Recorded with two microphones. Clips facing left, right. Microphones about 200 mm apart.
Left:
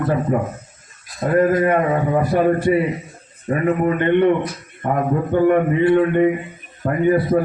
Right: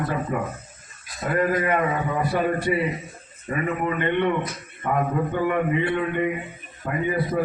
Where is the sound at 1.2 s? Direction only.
40° left (ahead or behind).